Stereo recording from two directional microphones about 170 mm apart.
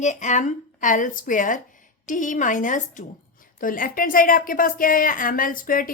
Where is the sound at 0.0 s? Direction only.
45° left (ahead or behind).